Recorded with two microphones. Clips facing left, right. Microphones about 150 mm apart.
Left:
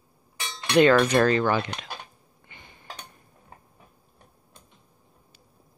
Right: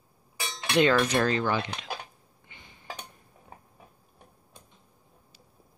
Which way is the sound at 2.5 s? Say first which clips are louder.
Left 3 dB; 55° left (ahead or behind).